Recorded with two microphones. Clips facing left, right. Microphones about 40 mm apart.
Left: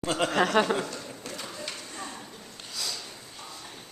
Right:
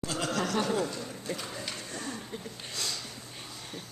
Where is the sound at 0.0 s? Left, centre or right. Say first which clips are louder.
Left 6 dB; left.